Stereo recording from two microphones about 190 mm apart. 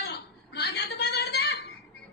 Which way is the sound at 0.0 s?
60° left (ahead or behind).